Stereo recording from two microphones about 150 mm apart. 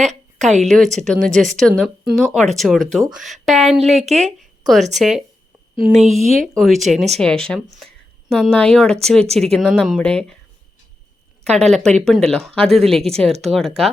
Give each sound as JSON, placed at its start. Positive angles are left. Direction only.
{"t": 0.0, "sound": "a sound", "side_deg": -50}
{"t": 0.6, "sound": "speech", "side_deg": 5}
{"t": 11.5, "sound": "speech", "side_deg": 0}